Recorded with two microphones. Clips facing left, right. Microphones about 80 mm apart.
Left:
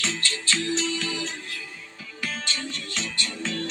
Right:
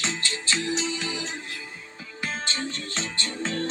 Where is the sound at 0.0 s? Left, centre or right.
Right.